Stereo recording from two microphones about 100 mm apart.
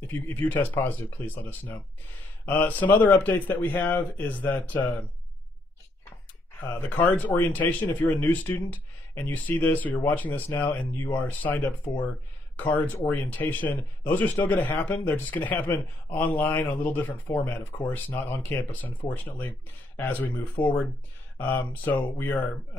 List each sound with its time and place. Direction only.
0.0 s speech: 20° left (ahead or behind)
6.9 s speech: 15° left (ahead or behind)